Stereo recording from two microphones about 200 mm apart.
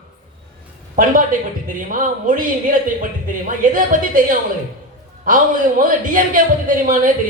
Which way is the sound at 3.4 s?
45° right (ahead or behind).